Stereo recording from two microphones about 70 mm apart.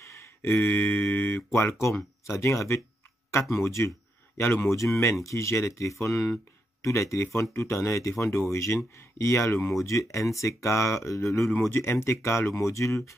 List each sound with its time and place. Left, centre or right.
0.0 s a sound: left
2.2 s speech: left
9.8 s speech: left